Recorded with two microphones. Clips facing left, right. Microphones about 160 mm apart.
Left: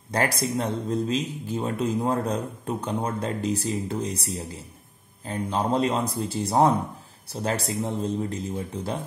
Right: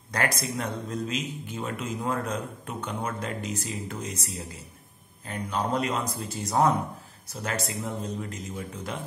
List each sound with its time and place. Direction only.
0.1 s a man's voice: 30° left (ahead or behind)